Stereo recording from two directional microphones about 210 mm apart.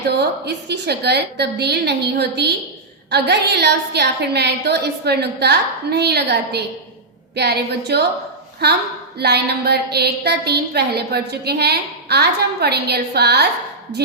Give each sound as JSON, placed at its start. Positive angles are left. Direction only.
{"t": 0.2, "sound": "a woman's voice", "side_deg": -50}